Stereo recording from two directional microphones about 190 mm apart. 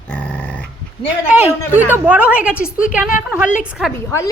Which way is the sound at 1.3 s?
10° right (ahead or behind).